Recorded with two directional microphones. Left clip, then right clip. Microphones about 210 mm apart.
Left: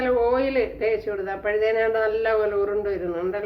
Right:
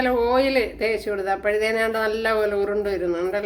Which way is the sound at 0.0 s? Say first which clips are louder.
Right 1 dB; 40° right (ahead or behind).